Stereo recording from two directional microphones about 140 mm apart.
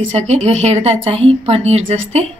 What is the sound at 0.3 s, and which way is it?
A woman's voice, 50° right (ahead or behind).